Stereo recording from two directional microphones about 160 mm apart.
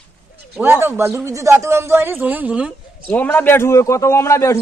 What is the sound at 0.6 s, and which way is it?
A man's voice, 15° right (ahead or behind).